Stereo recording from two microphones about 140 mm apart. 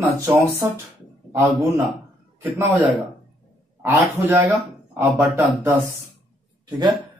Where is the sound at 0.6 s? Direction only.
20° right (ahead or behind).